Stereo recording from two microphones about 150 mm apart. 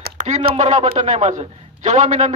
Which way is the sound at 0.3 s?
50° right (ahead or behind).